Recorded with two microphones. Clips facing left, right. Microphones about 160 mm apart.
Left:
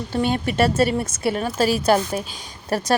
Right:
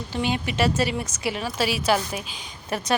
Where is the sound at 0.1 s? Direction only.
45° left (ahead or behind).